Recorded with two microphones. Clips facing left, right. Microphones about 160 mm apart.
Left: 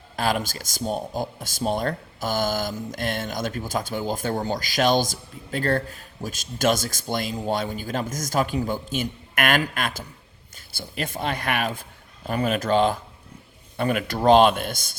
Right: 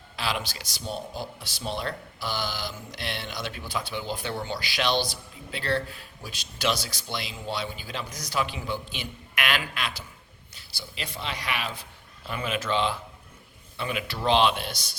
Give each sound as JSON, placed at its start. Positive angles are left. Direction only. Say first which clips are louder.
{"t": 0.2, "sound": "speech", "louder": "left 6 dB", "side_deg": 45}